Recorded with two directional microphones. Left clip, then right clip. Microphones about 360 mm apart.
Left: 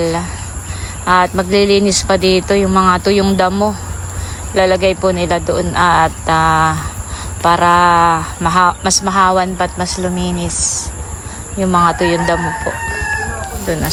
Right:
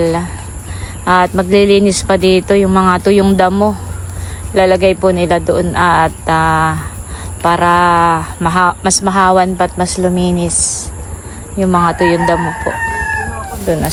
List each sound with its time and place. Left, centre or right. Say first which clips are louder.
0.0 s a woman's voice: right 3 dB; centre